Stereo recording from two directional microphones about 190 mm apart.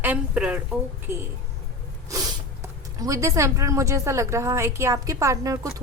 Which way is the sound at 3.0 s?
15° right (ahead or behind).